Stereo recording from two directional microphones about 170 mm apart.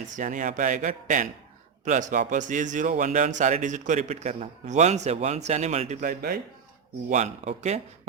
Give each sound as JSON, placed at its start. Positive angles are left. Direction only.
{"t": 0.1, "sound": "speech", "side_deg": -50}
{"t": 7.1, "sound": "speech", "side_deg": -45}